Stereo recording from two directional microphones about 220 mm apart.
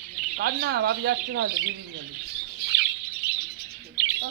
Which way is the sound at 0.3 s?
45° right (ahead or behind).